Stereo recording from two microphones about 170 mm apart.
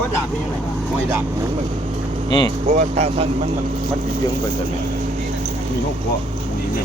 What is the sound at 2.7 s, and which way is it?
Speech, 40° right (ahead or behind).